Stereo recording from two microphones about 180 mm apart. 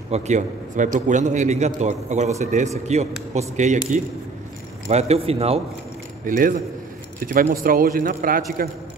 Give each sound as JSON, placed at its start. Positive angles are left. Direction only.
{"t": 0.1, "sound": "speech", "side_deg": -40}
{"t": 6.2, "sound": "a man's voice", "side_deg": -50}